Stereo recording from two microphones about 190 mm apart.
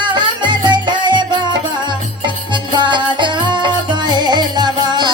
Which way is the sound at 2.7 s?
25° right (ahead or behind).